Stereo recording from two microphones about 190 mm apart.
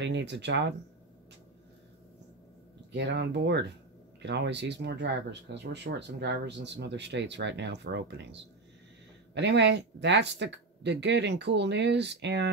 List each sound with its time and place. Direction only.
0.0 s speech: 65° right (ahead or behind)
2.9 s speech: 65° right (ahead or behind)